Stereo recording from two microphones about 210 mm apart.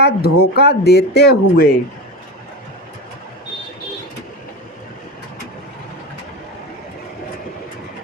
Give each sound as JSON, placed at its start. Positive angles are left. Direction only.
{"t": 0.0, "sound": "speech", "side_deg": 50}